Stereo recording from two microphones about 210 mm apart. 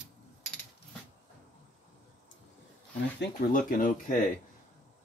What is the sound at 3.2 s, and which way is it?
Speech, 40° left (ahead or behind).